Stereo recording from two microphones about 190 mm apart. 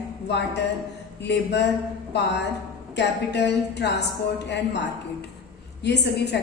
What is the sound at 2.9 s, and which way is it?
Speech, 65° left (ahead or behind).